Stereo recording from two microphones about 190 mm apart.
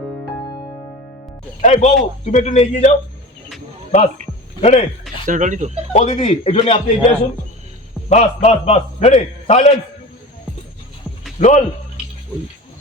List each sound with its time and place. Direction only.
1.6 s a man's voice: 35° left (ahead or behind)
4.6 s a man's voice: 35° left (ahead or behind)
5.2 s speech: 40° right (ahead or behind)
5.9 s a man's voice: 35° left (ahead or behind)
8.1 s a man's voice: 35° left (ahead or behind)
11.3 s speech: 40° left (ahead or behind)